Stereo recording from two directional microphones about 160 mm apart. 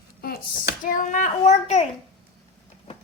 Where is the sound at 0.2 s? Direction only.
70° left (ahead or behind); by 1.9 s 45° left (ahead or behind).